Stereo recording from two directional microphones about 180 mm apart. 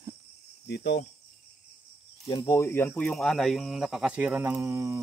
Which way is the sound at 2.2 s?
20° left (ahead or behind).